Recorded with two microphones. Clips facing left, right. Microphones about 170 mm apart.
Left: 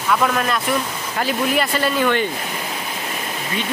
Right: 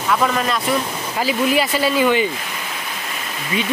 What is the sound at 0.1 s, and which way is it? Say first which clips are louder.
Speech: even; centre (ahead or behind).